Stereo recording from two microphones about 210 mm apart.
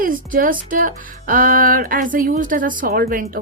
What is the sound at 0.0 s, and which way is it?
Speech, 40° right (ahead or behind).